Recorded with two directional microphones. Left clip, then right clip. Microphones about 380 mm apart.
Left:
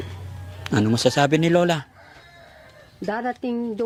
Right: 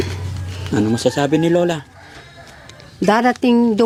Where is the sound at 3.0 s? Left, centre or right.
Centre.